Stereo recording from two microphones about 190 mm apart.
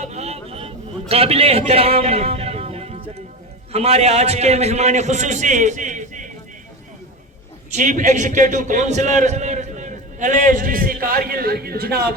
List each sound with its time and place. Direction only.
0.0 s a sound: 35° right (ahead or behind)
3.7 s a man's voice: 35° right (ahead or behind)
7.8 s a man's voice: 40° right (ahead or behind); by 12.1 s 55° right (ahead or behind)